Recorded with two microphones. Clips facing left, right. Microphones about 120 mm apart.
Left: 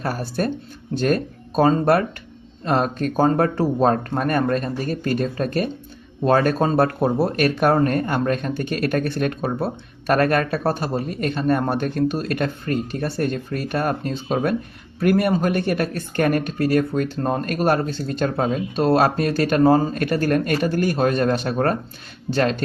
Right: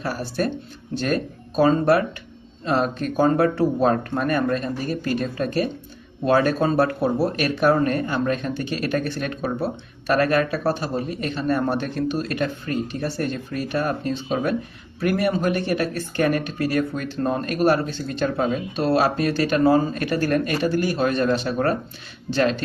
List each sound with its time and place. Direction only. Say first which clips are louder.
0.0 s speech: left 1 dB; 45° left (ahead or behind)